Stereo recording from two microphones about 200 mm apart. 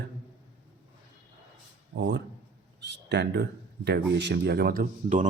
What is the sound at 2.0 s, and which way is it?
Speech, 60° right (ahead or behind).